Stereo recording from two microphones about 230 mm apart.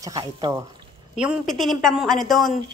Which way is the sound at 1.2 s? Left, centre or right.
Centre.